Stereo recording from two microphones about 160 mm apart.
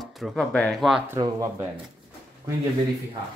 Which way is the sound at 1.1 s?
20° right (ahead or behind).